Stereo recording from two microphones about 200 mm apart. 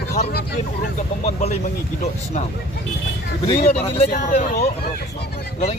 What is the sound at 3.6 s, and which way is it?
Speech, 30° left (ahead or behind).